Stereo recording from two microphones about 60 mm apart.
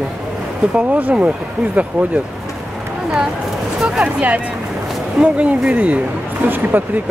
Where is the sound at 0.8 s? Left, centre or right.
Right.